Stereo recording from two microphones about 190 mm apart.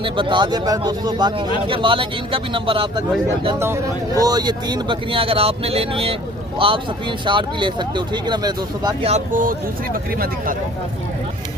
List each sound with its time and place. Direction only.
0.0 s speech: 25° right (ahead or behind)
3.6 s speech: 15° right (ahead or behind)
9.0 s speech: 40° right (ahead or behind)